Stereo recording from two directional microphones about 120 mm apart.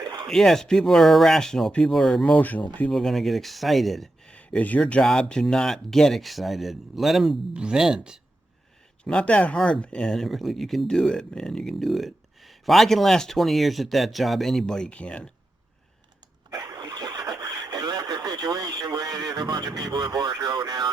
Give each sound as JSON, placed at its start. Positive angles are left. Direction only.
{"t": 0.0, "sound": "a sound", "side_deg": -35}
{"t": 0.3, "sound": "speech", "side_deg": 5}
{"t": 2.9, "sound": "speech", "side_deg": 0}
{"t": 9.0, "sound": "speech", "side_deg": 10}
{"t": 16.5, "sound": "a sound", "side_deg": -35}
{"t": 20.1, "sound": "speech", "side_deg": -35}